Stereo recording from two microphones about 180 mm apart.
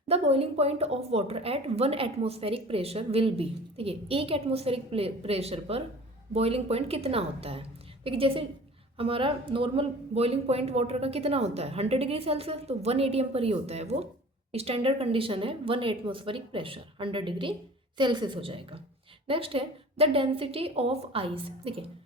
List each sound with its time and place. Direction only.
0.1 s a woman's voice: 35° right (ahead or behind)